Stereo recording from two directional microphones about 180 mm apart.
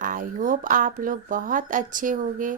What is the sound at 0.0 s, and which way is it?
A woman's voice, 50° right (ahead or behind).